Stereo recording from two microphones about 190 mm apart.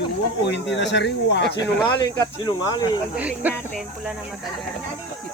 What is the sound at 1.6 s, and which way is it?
Speech, 20° left (ahead or behind).